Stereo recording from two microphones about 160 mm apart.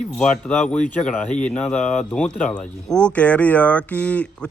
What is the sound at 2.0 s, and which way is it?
Speech, 5° left (ahead or behind).